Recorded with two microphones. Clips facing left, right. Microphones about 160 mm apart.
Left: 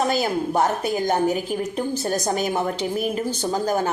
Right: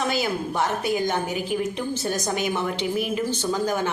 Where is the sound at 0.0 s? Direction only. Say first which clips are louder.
Left 3 dB; 40° left (ahead or behind).